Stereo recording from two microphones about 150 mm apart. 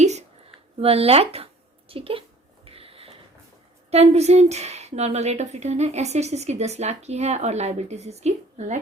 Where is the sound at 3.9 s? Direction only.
45° right (ahead or behind).